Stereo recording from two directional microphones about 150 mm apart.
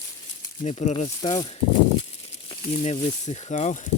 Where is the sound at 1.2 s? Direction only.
30° left (ahead or behind); by 3.8 s 55° left (ahead or behind).